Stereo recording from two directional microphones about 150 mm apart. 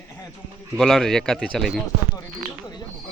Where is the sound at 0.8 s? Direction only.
Centre (ahead or behind).